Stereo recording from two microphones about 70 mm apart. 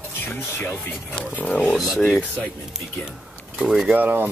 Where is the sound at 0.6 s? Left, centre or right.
Centre.